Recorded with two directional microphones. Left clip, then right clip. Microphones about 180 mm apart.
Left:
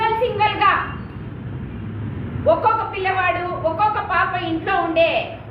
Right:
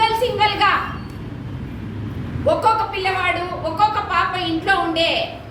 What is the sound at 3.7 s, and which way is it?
A woman's voice, 20° right (ahead or behind).